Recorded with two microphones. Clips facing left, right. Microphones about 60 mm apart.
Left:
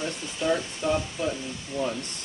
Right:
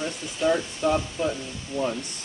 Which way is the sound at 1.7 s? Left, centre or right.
Left.